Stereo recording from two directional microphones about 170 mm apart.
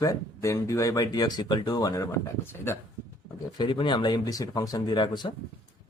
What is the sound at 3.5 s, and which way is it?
Speech, 25° left (ahead or behind).